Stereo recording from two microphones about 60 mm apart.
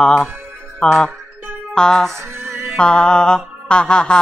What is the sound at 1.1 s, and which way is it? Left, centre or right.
Music, right.